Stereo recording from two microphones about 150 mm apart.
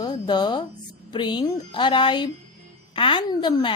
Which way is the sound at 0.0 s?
30° left (ahead or behind).